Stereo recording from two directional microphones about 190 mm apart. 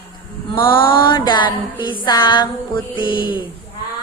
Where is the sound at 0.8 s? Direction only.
25° left (ahead or behind).